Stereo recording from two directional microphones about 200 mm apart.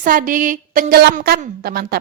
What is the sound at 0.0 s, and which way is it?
A woman's voice, 45° right (ahead or behind).